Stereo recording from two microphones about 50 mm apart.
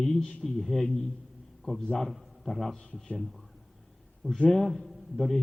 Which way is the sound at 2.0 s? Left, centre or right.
Centre.